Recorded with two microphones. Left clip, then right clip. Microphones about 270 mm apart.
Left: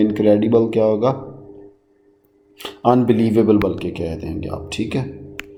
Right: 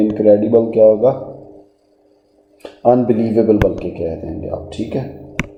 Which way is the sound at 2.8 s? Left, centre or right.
Left.